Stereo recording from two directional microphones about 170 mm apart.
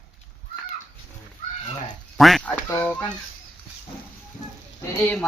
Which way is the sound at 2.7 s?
15° left (ahead or behind).